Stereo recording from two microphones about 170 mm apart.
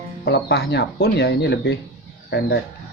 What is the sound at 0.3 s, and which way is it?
Speech, 75° left (ahead or behind).